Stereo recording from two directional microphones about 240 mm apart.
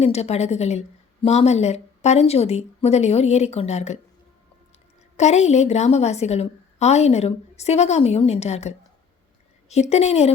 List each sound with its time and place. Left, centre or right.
0.0 s a woman's voice: left
5.1 s a woman's voice: left